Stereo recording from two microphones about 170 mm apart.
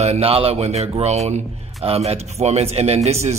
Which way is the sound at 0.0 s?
35° right (ahead or behind).